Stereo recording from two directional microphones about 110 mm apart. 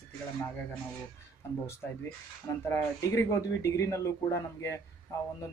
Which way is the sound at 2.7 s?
25° left (ahead or behind).